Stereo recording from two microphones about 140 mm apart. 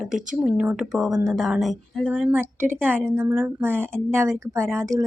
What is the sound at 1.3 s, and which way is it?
A woman's voice, centre (ahead or behind).